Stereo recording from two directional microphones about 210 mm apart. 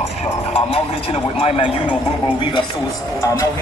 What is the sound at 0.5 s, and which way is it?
A man's voice, 30° left (ahead or behind).